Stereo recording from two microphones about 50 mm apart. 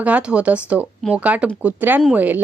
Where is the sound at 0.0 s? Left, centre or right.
Right.